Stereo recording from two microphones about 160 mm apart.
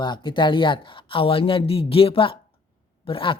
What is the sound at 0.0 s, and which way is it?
Speech, 30° left (ahead or behind).